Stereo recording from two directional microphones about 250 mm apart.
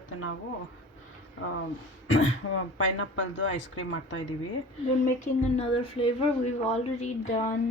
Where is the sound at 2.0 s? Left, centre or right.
Left.